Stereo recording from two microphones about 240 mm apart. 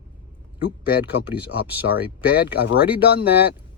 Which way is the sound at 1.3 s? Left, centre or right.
Centre.